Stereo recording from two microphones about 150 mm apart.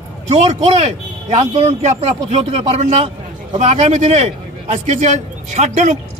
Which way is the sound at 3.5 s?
55° right (ahead or behind).